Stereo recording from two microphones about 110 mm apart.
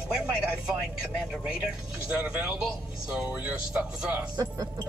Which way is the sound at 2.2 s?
10° right (ahead or behind).